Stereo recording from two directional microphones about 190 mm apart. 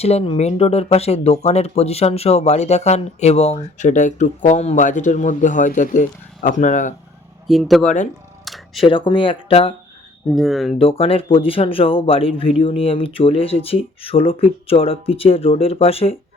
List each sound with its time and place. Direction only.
0.0 s speech: 35° left (ahead or behind)
7.4 s speech: centre (ahead or behind)
7.9 s speech: 40° left (ahead or behind)
8.4 s camera: centre (ahead or behind)
8.8 s speech: 25° left (ahead or behind)
10.2 s speech: centre (ahead or behind)
10.8 s speech: 30° left (ahead or behind)